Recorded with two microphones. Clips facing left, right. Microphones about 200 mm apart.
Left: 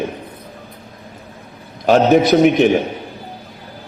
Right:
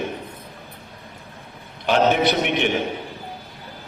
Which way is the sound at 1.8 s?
40° left (ahead or behind).